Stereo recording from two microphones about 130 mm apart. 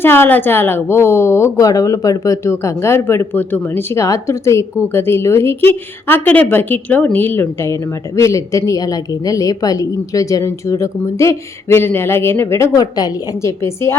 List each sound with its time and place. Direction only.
0.0 s a woman's voice: 15° left (ahead or behind)